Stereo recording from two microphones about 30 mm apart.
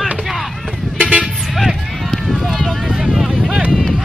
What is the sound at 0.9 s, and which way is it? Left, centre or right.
Vehicle, right.